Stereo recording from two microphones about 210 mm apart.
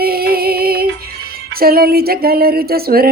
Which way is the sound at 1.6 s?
45° right (ahead or behind).